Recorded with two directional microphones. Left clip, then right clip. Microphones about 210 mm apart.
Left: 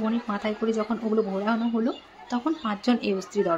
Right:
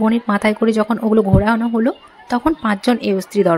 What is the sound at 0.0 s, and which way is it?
A woman's voice, 45° right (ahead or behind).